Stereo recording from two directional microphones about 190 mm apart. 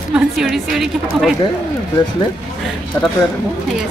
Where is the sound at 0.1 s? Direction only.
Centre (ahead or behind).